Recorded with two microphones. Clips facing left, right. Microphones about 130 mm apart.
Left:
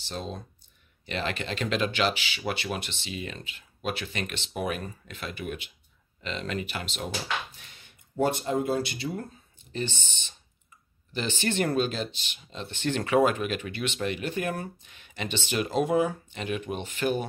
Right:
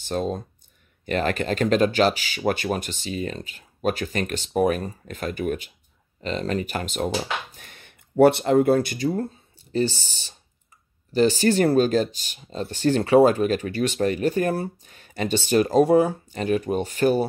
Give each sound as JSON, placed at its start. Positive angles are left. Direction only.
{"t": 0.0, "sound": "speech", "side_deg": -50}